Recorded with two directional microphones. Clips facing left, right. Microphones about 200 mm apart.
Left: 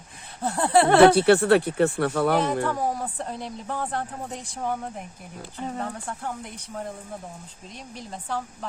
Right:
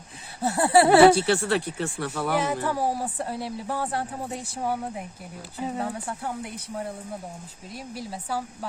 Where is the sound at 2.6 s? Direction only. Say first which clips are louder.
Even; 10° right (ahead or behind).